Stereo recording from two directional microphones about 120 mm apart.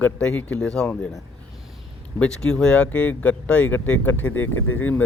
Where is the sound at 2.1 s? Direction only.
5° left (ahead or behind).